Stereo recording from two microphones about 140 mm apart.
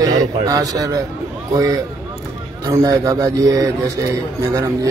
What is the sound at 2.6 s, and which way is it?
A man's voice, 25° right (ahead or behind).